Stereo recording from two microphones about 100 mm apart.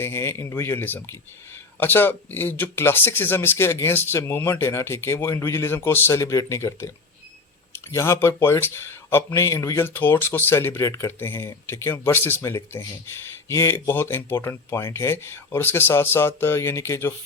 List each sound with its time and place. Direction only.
0.0 s speech: 25° left (ahead or behind)